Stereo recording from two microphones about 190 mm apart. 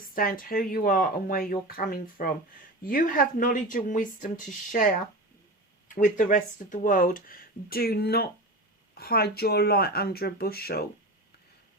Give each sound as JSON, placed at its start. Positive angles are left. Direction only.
{"t": 0.1, "sound": "speech", "side_deg": 50}
{"t": 5.9, "sound": "speech", "side_deg": 45}